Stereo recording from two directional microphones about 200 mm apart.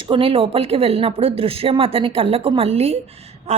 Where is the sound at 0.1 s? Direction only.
25° right (ahead or behind).